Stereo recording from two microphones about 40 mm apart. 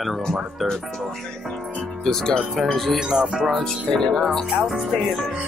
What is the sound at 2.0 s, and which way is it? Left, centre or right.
Speech, centre.